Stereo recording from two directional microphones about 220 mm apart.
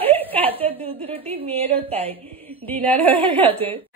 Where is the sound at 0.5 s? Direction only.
25° right (ahead or behind).